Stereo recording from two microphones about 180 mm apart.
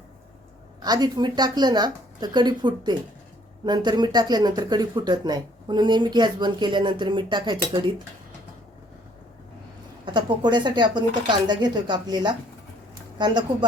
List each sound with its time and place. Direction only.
0.8 s speech: 20° right (ahead or behind)
10.1 s speech: 25° right (ahead or behind)